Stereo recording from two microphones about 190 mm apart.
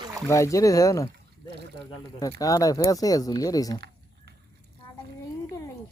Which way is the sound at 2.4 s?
20° left (ahead or behind).